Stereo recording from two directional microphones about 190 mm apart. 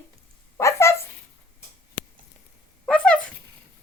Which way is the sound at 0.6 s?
15° left (ahead or behind).